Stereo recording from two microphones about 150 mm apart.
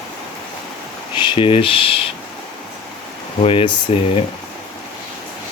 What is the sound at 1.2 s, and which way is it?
Speech, 35° left (ahead or behind).